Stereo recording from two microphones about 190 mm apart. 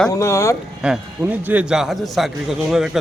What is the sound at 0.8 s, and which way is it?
A man's voice, 5° right (ahead or behind).